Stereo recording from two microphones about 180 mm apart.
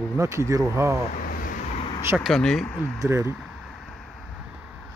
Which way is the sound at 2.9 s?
15° right (ahead or behind).